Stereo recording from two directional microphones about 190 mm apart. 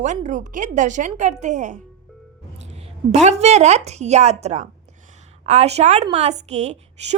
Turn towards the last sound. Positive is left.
turn(degrees=-35)  # may be behind; listen again after turning